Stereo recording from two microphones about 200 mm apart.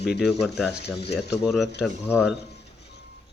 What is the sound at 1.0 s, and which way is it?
Speech, 55° left (ahead or behind).